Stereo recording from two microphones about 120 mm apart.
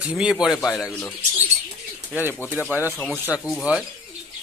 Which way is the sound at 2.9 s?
5° left (ahead or behind).